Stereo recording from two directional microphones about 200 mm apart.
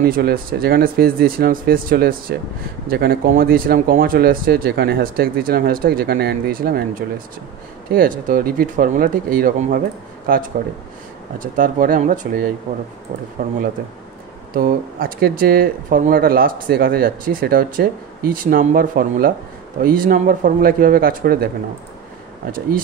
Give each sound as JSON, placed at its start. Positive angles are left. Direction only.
{"t": 0.0, "sound": "speech", "side_deg": -50}
{"t": 14.5, "sound": "speech", "side_deg": -45}